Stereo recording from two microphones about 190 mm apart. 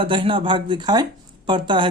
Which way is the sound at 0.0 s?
25° right (ahead or behind).